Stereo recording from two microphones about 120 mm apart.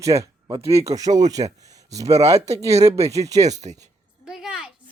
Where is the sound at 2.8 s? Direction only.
60° right (ahead or behind).